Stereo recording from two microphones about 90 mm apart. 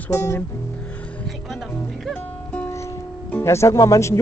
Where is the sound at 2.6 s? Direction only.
35° left (ahead or behind).